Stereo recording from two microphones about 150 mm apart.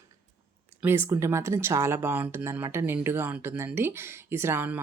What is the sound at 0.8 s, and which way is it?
Speech, 15° right (ahead or behind).